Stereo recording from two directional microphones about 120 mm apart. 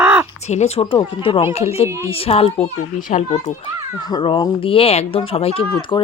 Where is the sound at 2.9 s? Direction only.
90° left.